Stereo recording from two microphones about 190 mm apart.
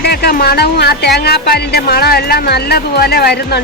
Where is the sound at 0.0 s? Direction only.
55° left (ahead or behind).